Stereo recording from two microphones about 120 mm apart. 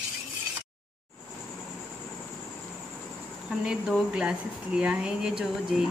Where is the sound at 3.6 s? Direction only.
5° right (ahead or behind).